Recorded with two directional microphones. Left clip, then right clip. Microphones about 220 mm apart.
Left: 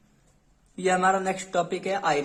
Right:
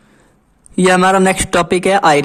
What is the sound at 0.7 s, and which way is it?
Speech, 50° right (ahead or behind).